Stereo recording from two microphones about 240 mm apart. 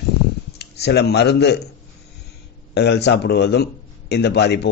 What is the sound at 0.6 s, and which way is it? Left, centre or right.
Speech, left.